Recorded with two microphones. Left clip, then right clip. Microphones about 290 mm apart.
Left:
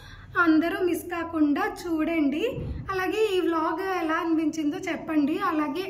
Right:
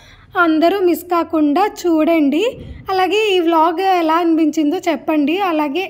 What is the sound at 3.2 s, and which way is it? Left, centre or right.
Speech, centre.